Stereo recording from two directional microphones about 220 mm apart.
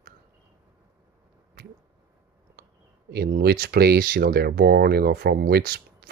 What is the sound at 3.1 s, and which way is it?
Speech, 45° right (ahead or behind).